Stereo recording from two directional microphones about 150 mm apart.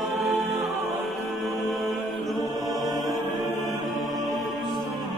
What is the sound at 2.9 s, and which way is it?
Choir, 25° right (ahead or behind).